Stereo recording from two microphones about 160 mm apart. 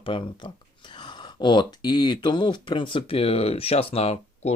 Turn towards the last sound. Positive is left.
turn(degrees=40)  # may be behind; listen again after turning